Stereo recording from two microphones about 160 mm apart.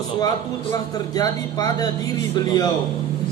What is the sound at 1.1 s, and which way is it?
A man's voice, 25° left (ahead or behind).